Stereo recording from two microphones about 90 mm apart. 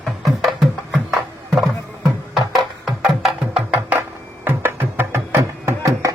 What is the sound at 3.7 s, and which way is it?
Music, 15° right (ahead or behind).